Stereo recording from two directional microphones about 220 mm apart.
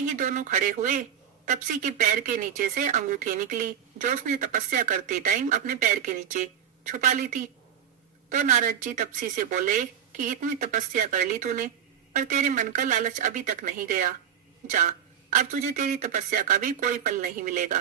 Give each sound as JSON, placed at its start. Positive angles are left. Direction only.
{"t": 0.0, "sound": "speech", "side_deg": -35}